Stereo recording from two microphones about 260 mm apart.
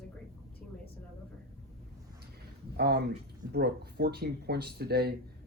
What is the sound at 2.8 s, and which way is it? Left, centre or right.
Speech, right.